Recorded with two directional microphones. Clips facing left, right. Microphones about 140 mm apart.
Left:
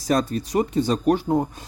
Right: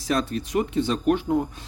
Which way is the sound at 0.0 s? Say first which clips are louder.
Left 3 dB; 40° left (ahead or behind).